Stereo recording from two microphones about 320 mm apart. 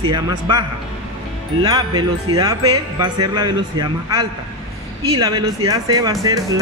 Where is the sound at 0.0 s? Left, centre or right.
Centre.